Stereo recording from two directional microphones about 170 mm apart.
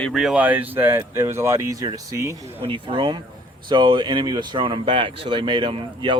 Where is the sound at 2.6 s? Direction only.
30° right (ahead or behind).